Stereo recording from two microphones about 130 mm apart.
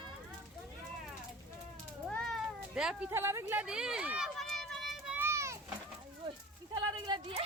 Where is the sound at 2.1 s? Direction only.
5° left (ahead or behind).